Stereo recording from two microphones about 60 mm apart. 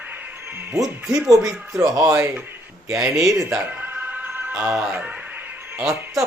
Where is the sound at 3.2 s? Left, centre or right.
Right.